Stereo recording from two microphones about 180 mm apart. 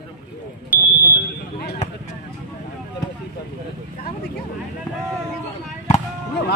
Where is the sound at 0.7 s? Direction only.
10° right (ahead or behind).